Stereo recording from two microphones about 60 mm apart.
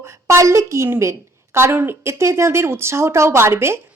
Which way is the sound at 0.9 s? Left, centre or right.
Right.